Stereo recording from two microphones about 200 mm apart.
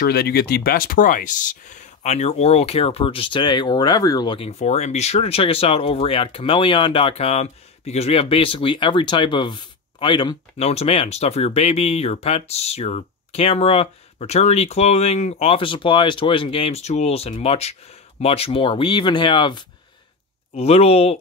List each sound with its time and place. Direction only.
0.0 s speech: 50° left (ahead or behind); by 21.2 s 30° left (ahead or behind)